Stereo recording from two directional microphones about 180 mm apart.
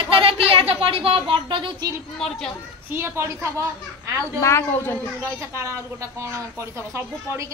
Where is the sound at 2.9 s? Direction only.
15° right (ahead or behind).